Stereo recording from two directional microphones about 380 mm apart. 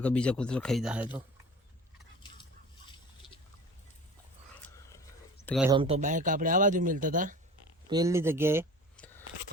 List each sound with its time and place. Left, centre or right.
0.0 s speech: centre
5.5 s speech: centre
5.7 s speech: centre
7.9 s speech: centre